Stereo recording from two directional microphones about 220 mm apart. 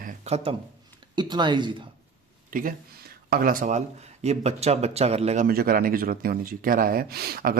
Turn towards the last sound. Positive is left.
turn(degrees=-45)  # may be behind; listen again after turning